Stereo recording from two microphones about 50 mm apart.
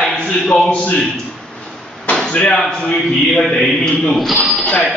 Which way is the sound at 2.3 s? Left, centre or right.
Centre.